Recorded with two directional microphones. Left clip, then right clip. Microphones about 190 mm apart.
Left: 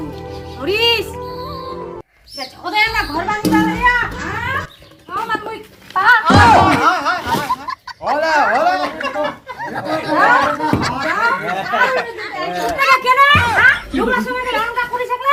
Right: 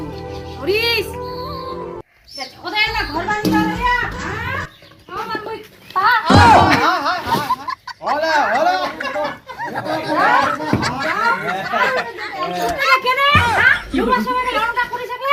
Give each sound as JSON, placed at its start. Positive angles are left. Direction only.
{"t": 0.6, "sound": "music", "side_deg": 5}
{"t": 3.5, "sound": "children playing", "side_deg": 0}
{"t": 5.9, "sound": "music", "side_deg": 0}
{"t": 6.8, "sound": "music", "side_deg": 20}
{"t": 7.3, "sound": "a sound", "side_deg": 0}